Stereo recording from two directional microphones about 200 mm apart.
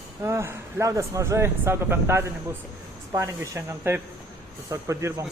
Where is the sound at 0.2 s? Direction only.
15° right (ahead or behind).